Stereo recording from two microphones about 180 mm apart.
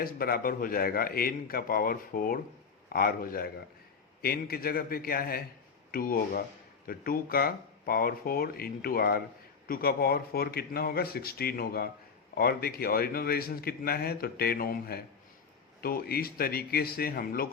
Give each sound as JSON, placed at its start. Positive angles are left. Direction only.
{"t": 0.0, "sound": "a man's voice", "side_deg": 55}